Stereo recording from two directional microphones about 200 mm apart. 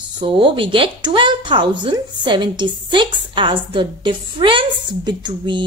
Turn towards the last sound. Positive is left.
turn(degrees=-25)  # may be behind; listen again after turning